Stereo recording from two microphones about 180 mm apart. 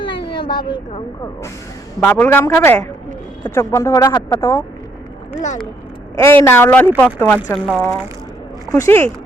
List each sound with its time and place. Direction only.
0.5 s speech: 25° left (ahead or behind)
2.0 s speech: 10° left (ahead or behind)
6.1 s speech: 15° left (ahead or behind)